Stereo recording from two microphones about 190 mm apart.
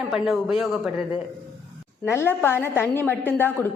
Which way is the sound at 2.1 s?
10° left (ahead or behind).